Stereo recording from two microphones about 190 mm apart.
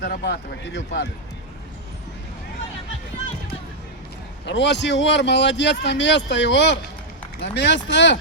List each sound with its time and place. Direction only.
0.0 s speech: 65° left (ahead or behind)
4.4 s speech: 65° left (ahead or behind)